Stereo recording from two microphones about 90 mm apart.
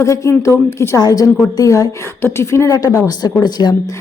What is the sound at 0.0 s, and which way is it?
Speech, 35° left (ahead or behind).